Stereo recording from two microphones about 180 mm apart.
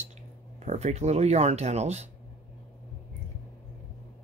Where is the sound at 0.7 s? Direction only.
40° right (ahead or behind).